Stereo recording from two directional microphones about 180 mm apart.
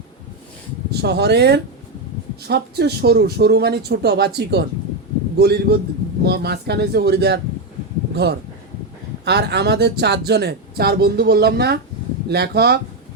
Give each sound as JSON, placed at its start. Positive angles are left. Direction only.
{"t": 0.9, "sound": "speech", "side_deg": -65}